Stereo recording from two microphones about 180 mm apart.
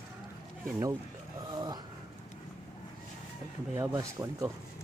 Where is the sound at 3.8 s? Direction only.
15° right (ahead or behind).